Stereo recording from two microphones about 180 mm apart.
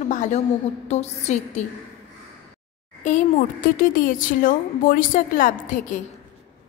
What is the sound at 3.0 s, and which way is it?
A child's voice, 45° left (ahead or behind).